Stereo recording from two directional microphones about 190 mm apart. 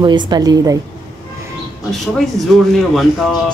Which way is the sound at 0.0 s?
25° right (ahead or behind).